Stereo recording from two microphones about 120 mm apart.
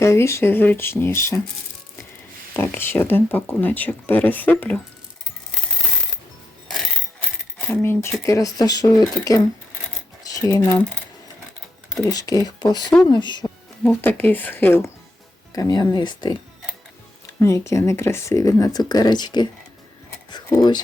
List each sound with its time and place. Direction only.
0.0 s speech: 20° left (ahead or behind)
2.5 s speech: 20° left (ahead or behind)
7.7 s speech: 20° left (ahead or behind)
10.2 s a sound: 30° left (ahead or behind)
12.0 s speech: 30° left (ahead or behind)
13.8 s speech: 15° left (ahead or behind)
15.5 s speech: 30° left (ahead or behind)
17.4 s speech: 25° left (ahead or behind)
20.6 s speech: 40° left (ahead or behind)